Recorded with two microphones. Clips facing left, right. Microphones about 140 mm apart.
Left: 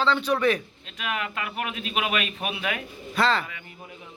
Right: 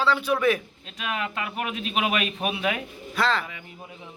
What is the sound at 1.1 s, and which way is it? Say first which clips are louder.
A man's voice: right 2 dB; 25° right (ahead or behind).